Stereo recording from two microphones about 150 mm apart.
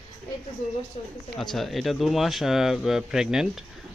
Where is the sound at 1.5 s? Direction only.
Centre (ahead or behind).